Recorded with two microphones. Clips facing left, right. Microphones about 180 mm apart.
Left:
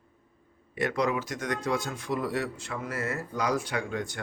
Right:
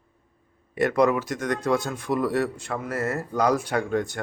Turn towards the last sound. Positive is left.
turn(degrees=-50)  # may be behind; listen again after turning